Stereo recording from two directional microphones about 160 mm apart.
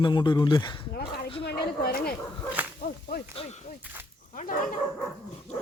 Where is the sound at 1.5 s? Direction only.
75° left (ahead or behind).